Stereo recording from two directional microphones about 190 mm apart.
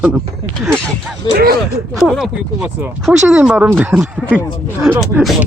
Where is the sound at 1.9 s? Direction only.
Centre (ahead or behind).